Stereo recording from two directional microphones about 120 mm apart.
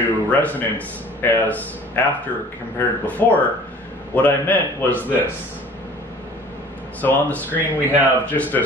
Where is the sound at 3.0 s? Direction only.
15° left (ahead or behind).